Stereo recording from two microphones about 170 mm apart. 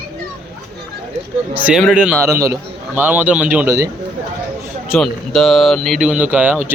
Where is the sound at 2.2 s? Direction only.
15° right (ahead or behind).